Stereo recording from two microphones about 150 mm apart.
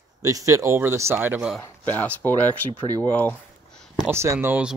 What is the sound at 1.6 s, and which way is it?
Speech, 10° left (ahead or behind).